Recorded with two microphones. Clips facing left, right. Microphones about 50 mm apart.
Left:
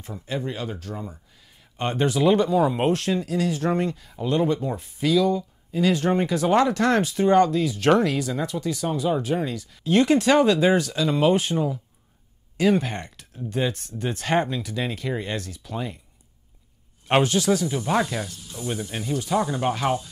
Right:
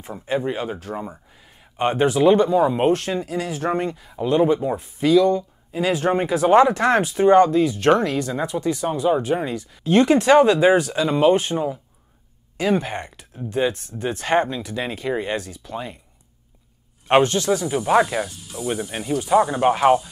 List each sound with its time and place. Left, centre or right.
0.0 s speech: right; by 8.4 s centre
8.4 s speech: centre
9.8 s speech: centre
11.5 s speech: centre
12.5 s speech: centre
17.1 s speech: centre
17.6 s speech: centre